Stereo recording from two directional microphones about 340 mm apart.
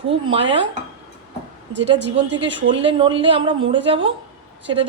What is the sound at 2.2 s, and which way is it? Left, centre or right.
Speech, right.